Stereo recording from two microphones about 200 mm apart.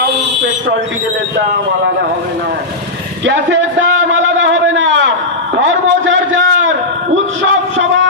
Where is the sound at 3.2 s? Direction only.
65° right (ahead or behind).